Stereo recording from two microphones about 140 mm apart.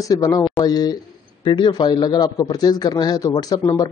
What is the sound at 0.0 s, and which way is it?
A man's voice, 25° left (ahead or behind).